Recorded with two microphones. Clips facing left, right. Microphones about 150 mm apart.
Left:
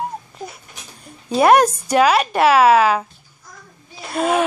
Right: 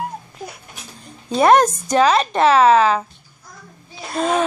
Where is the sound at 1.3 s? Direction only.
10° left (ahead or behind).